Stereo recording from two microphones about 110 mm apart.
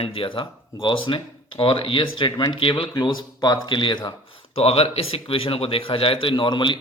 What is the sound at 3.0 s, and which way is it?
A man's voice, 40° left (ahead or behind).